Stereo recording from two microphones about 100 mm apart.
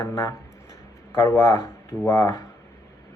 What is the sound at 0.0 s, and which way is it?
Speech, 25° left (ahead or behind).